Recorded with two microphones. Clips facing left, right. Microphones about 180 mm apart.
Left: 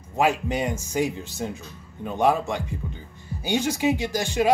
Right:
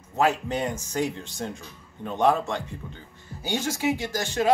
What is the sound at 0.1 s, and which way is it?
Speech, 10° left (ahead or behind).